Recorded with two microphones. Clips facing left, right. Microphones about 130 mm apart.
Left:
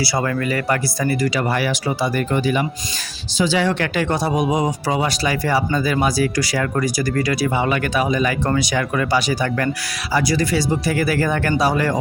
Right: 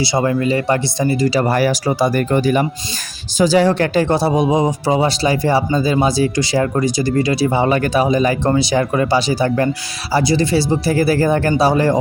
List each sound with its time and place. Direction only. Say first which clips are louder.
0.0 s speech: right 5 dB; 20° right (ahead or behind)
1.4 s speech: right 5 dB; 40° right (ahead or behind)